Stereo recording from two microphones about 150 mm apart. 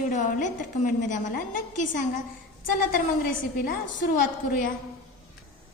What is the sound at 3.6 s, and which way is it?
Speech, 60° left (ahead or behind).